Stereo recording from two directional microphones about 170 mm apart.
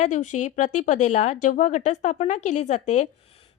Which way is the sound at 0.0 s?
45° left (ahead or behind).